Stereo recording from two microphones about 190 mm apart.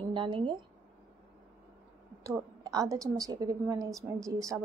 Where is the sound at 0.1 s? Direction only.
25° right (ahead or behind).